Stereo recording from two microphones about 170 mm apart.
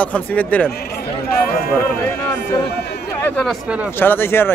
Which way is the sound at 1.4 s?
60° left (ahead or behind).